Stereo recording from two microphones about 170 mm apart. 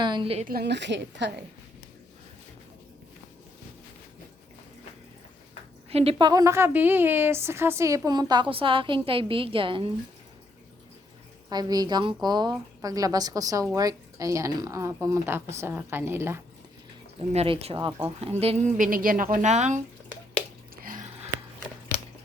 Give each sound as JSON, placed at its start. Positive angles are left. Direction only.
{"t": 0.0, "sound": "a woman's voice", "side_deg": -30}
{"t": 0.4, "sound": "a woman's voice", "side_deg": -70}
{"t": 5.9, "sound": "a woman's voice", "side_deg": -35}
{"t": 11.4, "sound": "a woman's voice", "side_deg": -20}
{"t": 17.2, "sound": "speech", "side_deg": -35}
{"t": 18.8, "sound": "a woman's voice", "side_deg": -55}